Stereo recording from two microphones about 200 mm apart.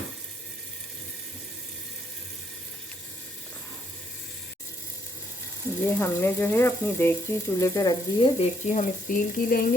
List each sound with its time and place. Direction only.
5.8 s speech: 10° left (ahead or behind)
8.4 s speech: 35° left (ahead or behind)